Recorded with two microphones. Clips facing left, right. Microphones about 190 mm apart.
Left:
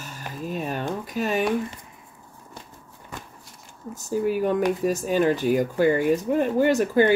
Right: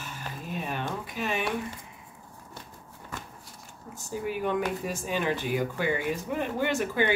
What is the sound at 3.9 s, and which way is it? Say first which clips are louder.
Speech: left 8 dB; 40° left (ahead or behind).